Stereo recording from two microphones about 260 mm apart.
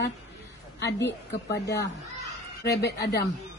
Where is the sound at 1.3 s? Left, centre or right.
Left.